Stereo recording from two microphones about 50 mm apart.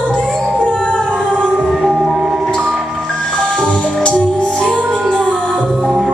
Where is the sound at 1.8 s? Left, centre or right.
Centre.